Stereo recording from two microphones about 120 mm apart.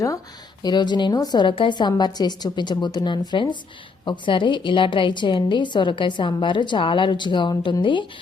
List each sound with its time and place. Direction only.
0.6 s a woman's voice: 35° left (ahead or behind)